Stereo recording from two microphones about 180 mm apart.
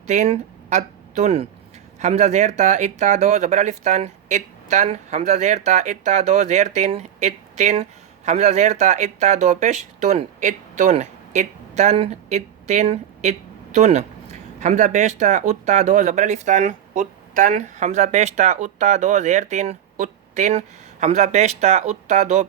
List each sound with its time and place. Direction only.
0.1 s speech: 40° right (ahead or behind)